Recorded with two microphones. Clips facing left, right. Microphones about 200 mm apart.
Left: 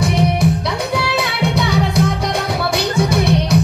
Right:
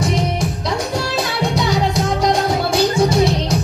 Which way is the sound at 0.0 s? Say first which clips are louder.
Left 3 dB; 60° left (ahead or behind).